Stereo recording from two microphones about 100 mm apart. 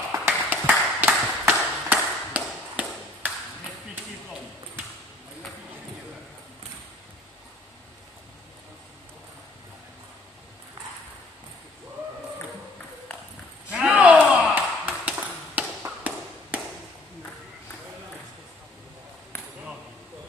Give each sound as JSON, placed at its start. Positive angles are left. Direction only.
{"t": 0.1, "sound": "tap", "side_deg": -25}
{"t": 13.7, "sound": "a sound", "side_deg": -15}
{"t": 14.9, "sound": "tap", "side_deg": -20}